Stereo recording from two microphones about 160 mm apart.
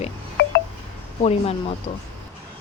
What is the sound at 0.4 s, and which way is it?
Telephone dialing, 90° left.